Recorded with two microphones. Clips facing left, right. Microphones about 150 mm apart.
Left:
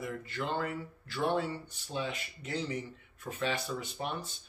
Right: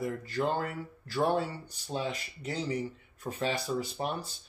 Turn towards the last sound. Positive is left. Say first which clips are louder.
# right 4 dB
turn(degrees=-35)  # may be behind; listen again after turning